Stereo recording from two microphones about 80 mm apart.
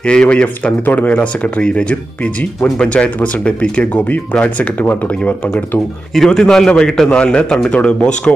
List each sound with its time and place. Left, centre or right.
0.0 s speech: centre
6.1 s speech: centre